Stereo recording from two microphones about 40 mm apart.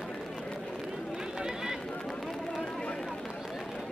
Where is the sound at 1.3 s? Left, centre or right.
Centre.